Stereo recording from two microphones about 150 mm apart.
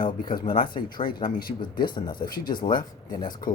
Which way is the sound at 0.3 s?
35° left (ahead or behind).